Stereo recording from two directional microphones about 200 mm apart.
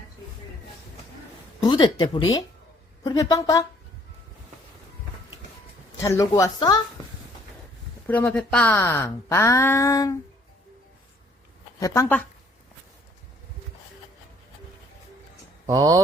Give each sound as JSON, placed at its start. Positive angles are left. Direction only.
{"t": 1.6, "sound": "speech", "side_deg": 20}
{"t": 6.0, "sound": "speech", "side_deg": 15}
{"t": 8.0, "sound": "speech", "side_deg": 10}
{"t": 11.8, "sound": "speech", "side_deg": 10}
{"t": 15.6, "sound": "speech", "side_deg": -15}